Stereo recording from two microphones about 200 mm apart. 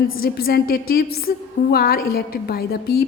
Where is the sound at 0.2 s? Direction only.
50° left (ahead or behind).